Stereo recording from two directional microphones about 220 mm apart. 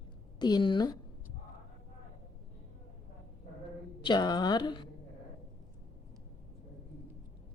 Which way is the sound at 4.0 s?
20° left (ahead or behind).